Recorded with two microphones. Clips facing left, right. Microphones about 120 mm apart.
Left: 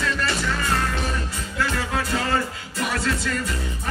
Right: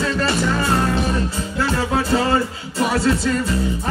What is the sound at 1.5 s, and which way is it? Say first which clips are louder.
Music: right 5 dB; 30° right (ahead or behind).